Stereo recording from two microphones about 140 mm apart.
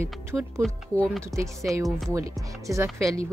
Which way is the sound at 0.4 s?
5° left (ahead or behind).